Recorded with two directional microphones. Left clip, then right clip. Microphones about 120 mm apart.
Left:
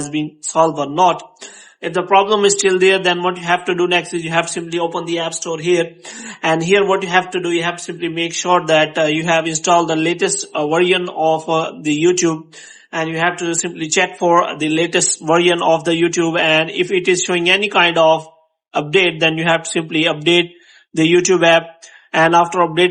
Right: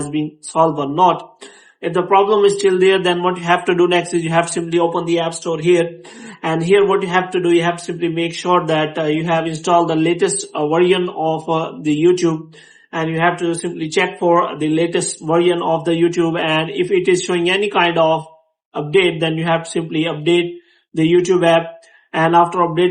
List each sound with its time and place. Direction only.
0.1 s speech: 25° left (ahead or behind)
4.1 s a man's voice: 5° left (ahead or behind)
4.7 s speech: 15° left (ahead or behind)
6.4 s a man's voice: 35° left (ahead or behind)
15.3 s a man's voice: 50° left (ahead or behind)
15.8 s a man's voice: 35° left (ahead or behind)